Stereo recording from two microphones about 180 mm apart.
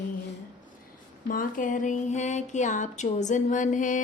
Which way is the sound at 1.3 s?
50° left (ahead or behind).